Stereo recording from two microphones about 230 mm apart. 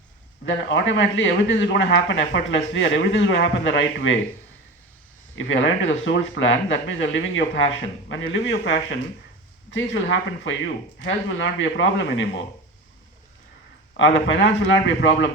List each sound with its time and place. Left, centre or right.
0.4 s speech: left
5.4 s speech: left
14.3 s speech: left